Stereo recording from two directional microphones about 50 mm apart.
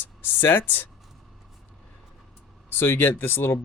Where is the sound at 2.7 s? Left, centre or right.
Left.